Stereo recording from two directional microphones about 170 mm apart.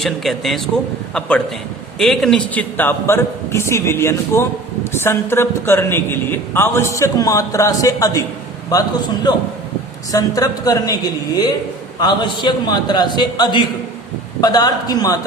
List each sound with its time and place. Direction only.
0.0 s speech: centre (ahead or behind)
2.0 s a man's voice: 5° left (ahead or behind); by 8.2 s 20° left (ahead or behind)
10.1 s a man's voice: 20° left (ahead or behind)